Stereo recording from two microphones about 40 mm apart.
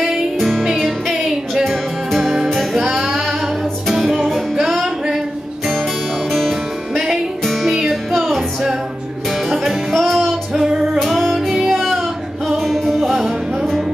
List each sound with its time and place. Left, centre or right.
0.4 s music: centre
6.9 s music: centre
8.3 s music: centre
9.5 s music: centre
10.5 s music: centre
11.0 s music: centre